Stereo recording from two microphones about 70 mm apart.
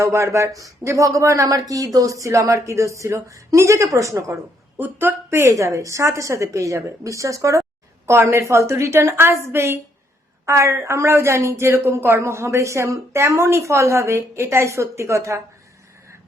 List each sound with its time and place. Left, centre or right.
0.0 s speech: right
4.8 s speech: right
8.0 s a woman's voice: right